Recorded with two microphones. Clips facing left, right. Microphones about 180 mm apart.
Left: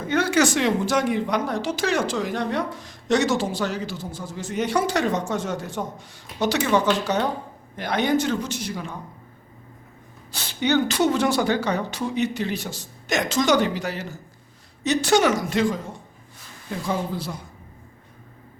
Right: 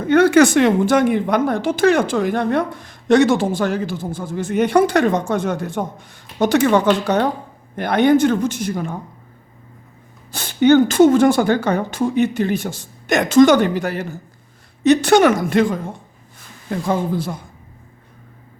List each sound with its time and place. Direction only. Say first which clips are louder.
0.1 s a woman's voice: right 9 dB; 55° right (ahead or behind)
10.3 s a woman's voice: right 9 dB; 50° right (ahead or behind)